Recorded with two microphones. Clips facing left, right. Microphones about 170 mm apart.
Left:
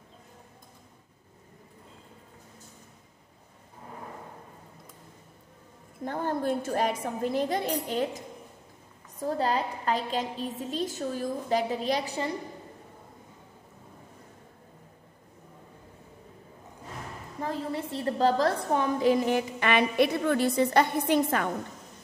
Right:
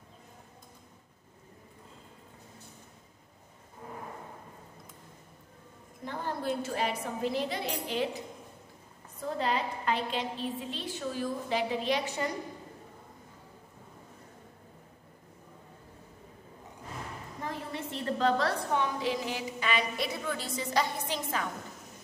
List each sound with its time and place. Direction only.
6.0 s a woman's voice: 50° left (ahead or behind)
9.2 s a woman's voice: 40° left (ahead or behind)
17.4 s a woman's voice: 30° left (ahead or behind); by 21.5 s 60° left (ahead or behind)